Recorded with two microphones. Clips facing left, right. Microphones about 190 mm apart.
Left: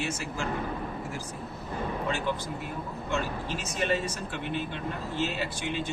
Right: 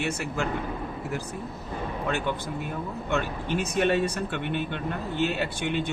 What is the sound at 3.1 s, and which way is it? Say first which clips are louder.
Speech: right 4 dB; 60° right (ahead or behind).